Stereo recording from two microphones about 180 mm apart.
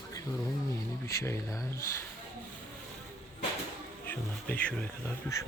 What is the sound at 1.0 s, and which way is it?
Speech, 15° left (ahead or behind).